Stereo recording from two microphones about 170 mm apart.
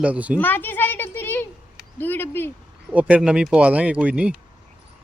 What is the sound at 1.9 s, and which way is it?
Speech, 10° left (ahead or behind).